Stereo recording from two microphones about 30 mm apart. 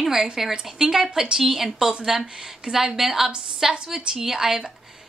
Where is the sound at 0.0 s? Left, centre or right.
Centre.